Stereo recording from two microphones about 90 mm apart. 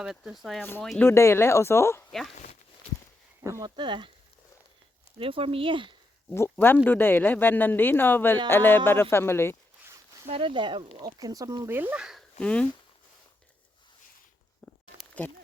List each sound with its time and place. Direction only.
0.0 s speech: 5° right (ahead or behind)
0.9 s speech: 30° left (ahead or behind)
3.6 s speech: 60° right (ahead or behind)
5.2 s speech: 90° right; by 5.9 s 70° right (ahead or behind)
6.3 s speech: 25° left (ahead or behind)
10.3 s speech: 70° right (ahead or behind)
11.0 s speech: 45° right (ahead or behind)
11.7 s speech: 20° right (ahead or behind)
11.9 s speech: 5° right (ahead or behind)
12.4 s speech: 10° left (ahead or behind)
14.6 s a sound: 5° left (ahead or behind)
15.2 s speech: 15° left (ahead or behind)